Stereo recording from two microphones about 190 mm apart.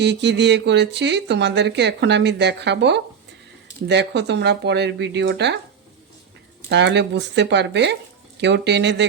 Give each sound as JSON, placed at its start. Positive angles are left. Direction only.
{"t": 0.0, "sound": "speech", "side_deg": -65}
{"t": 6.7, "sound": "speech", "side_deg": -65}